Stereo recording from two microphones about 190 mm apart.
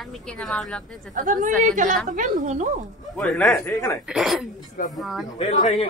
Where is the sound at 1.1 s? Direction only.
40° right (ahead or behind).